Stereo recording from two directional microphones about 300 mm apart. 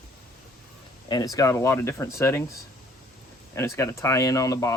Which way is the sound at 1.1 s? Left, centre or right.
Centre.